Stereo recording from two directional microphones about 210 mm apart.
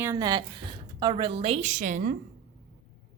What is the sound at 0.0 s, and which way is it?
A woman's voice, 15° right (ahead or behind).